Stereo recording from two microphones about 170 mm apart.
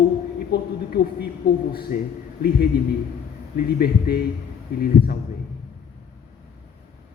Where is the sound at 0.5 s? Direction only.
70° left (ahead or behind).